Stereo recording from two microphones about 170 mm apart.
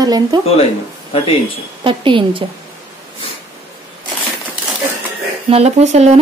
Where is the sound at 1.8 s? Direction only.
30° right (ahead or behind).